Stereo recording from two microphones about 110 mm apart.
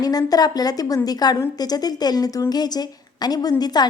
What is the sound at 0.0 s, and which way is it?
A woman's voice, 35° left (ahead or behind).